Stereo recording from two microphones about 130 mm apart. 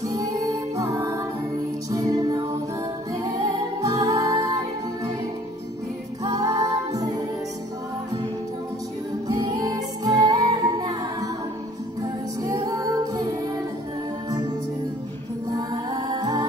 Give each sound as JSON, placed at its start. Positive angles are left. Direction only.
{"t": 0.1, "sound": "music", "side_deg": -25}
{"t": 6.2, "sound": "music", "side_deg": -25}
{"t": 9.3, "sound": "music", "side_deg": -30}
{"t": 15.5, "sound": "music", "side_deg": -30}